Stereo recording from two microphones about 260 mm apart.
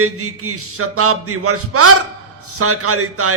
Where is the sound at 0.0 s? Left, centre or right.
Right.